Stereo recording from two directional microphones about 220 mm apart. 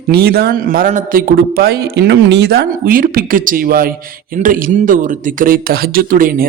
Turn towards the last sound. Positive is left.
turn(degrees=-40)  # may be behind; listen again after turning